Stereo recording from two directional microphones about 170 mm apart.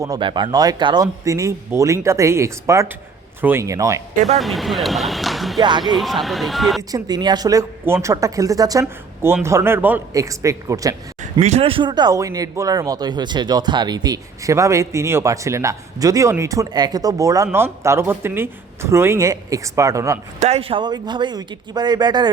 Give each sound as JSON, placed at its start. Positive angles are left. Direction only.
{"t": 0.0, "sound": "a man's voice", "side_deg": -25}
{"t": 4.4, "sound": "speech", "side_deg": 0}
{"t": 5.5, "sound": "speech", "side_deg": -25}
{"t": 6.0, "sound": "speech", "side_deg": 0}
{"t": 6.9, "sound": "speech", "side_deg": -25}
{"t": 11.2, "sound": "speech", "side_deg": -40}
{"t": 20.4, "sound": "speech", "side_deg": -35}